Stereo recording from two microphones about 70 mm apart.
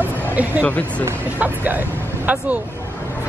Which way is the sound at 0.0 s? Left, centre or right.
Right.